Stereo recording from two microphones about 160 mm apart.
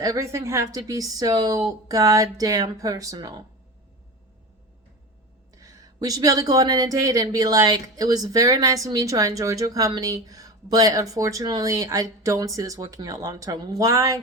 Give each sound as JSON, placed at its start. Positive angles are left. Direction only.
{"t": 0.0, "sound": "speech", "side_deg": -20}
{"t": 5.5, "sound": "speech", "side_deg": -20}